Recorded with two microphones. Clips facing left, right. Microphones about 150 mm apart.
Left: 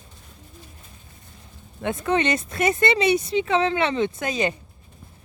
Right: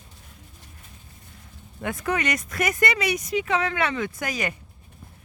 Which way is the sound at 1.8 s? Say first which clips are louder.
Left 4 dB; 25° left (ahead or behind).